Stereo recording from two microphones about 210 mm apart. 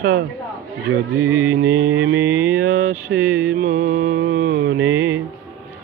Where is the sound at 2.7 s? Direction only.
45° right (ahead or behind).